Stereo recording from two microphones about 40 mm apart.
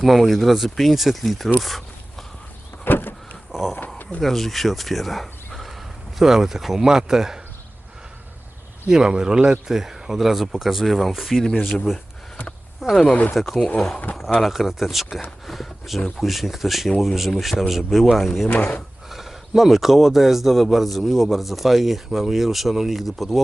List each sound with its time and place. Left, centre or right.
0.0 s speech: centre
1.5 s zipper: centre
2.8 s power windows: left
3.5 s a sound: centre
4.2 s speech: centre
8.9 s speech: centre
13.7 s speech: centre
14.4 s speech: centre
18.4 s speech: left
19.0 s speech: centre